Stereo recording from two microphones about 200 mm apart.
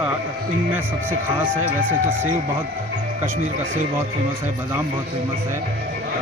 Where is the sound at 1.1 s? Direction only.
10° right (ahead or behind).